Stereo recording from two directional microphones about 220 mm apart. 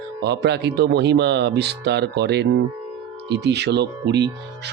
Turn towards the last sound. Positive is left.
turn(degrees=-50)  # may be behind; listen again after turning